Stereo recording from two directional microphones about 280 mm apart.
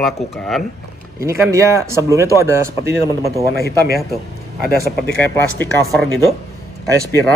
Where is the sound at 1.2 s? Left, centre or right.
Centre.